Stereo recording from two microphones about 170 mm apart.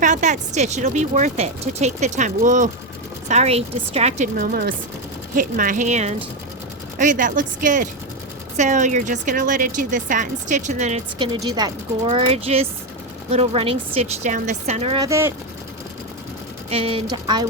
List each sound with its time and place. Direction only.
0.0 s a woman's voice: 45° right (ahead or behind)
4.4 s speech: 55° right (ahead or behind)
11.2 s speech: 25° right (ahead or behind)
12.0 s a woman's voice: 35° right (ahead or behind)
14.9 s speech: 20° right (ahead or behind)
16.6 s a woman's voice: 35° right (ahead or behind)